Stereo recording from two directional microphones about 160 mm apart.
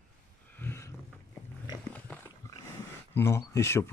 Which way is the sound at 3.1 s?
15° left (ahead or behind).